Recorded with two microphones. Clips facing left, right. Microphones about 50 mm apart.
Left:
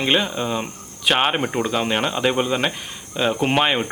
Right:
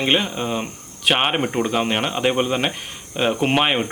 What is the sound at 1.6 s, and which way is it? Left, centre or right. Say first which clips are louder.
Speech: even; centre.